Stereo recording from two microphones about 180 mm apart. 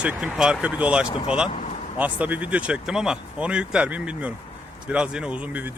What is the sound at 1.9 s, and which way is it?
Speech, 10° right (ahead or behind).